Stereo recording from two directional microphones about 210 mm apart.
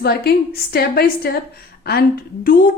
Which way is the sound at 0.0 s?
50° left (ahead or behind).